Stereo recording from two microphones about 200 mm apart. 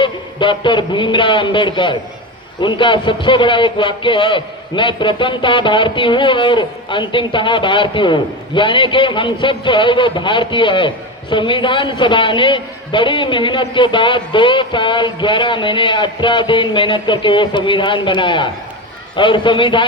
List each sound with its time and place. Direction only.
0.0 s a man's voice: 25° left (ahead or behind)